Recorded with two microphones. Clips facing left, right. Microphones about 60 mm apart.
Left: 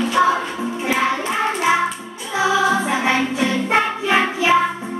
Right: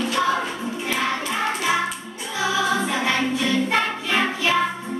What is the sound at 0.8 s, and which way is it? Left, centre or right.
Music, left.